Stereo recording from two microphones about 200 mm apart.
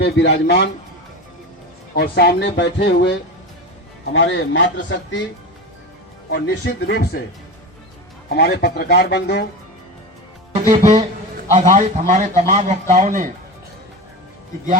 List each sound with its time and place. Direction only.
0.0 s speech: 60° left (ahead or behind)
2.0 s speech: 50° left (ahead or behind)
4.1 s speech: 70° left (ahead or behind)
6.3 s speech: 60° left (ahead or behind)
8.3 s speech: 55° left (ahead or behind)
10.5 s a man's voice: 35° right (ahead or behind)